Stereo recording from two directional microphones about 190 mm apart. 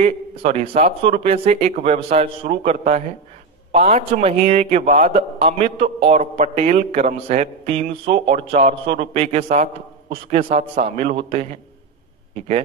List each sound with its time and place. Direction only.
0.0 s a man's voice: 35° right (ahead or behind)